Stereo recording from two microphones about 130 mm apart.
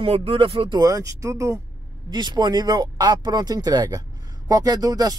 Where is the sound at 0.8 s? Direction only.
25° right (ahead or behind).